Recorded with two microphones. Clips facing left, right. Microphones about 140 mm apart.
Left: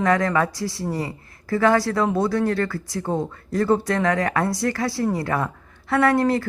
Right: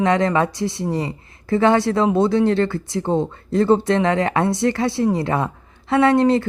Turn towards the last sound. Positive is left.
turn(degrees=-25)  # may be behind; listen again after turning